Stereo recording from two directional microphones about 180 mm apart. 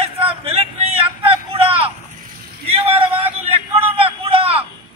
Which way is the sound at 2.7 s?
35° right (ahead or behind).